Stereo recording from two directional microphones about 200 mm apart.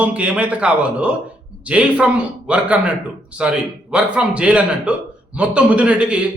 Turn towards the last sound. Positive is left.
turn(degrees=-5)  # may be behind; listen again after turning